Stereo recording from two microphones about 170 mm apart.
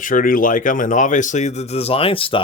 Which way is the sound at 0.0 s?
55° left (ahead or behind).